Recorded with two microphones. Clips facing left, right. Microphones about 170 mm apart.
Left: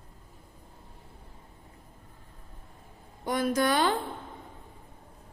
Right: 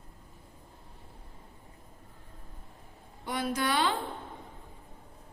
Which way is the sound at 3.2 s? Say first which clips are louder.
Left 5 dB; 45° left (ahead or behind).